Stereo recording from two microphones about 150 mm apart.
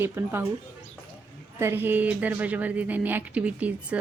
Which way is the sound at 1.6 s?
15° right (ahead or behind).